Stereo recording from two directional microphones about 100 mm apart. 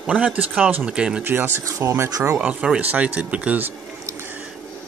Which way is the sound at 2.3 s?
10° right (ahead or behind).